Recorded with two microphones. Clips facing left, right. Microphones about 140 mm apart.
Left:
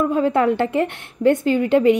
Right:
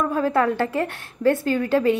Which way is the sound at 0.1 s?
20° left (ahead or behind).